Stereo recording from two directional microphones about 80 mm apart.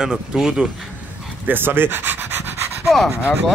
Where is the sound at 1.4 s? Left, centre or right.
Right.